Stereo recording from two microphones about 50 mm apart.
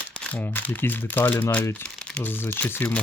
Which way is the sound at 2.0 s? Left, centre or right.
Centre.